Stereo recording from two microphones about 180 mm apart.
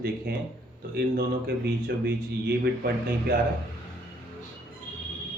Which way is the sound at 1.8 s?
65° right (ahead or behind).